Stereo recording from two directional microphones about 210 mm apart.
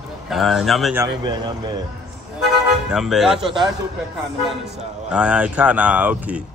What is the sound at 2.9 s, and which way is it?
Speech, centre (ahead or behind).